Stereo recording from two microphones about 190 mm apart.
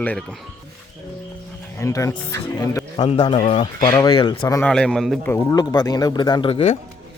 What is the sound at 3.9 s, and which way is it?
Speech, 20° left (ahead or behind).